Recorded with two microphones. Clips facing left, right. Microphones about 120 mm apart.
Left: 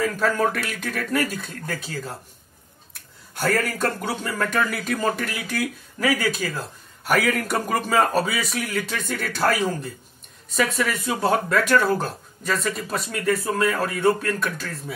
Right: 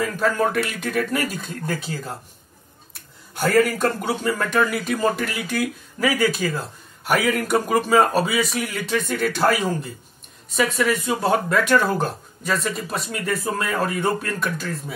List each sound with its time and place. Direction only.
0.2 s speech: 15° right (ahead or behind)
3.3 s speech: 15° right (ahead or behind)
8.6 s speech: 5° right (ahead or behind)
9.1 s speech: 20° right (ahead or behind)